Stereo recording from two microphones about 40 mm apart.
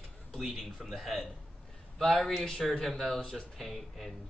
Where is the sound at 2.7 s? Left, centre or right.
Centre.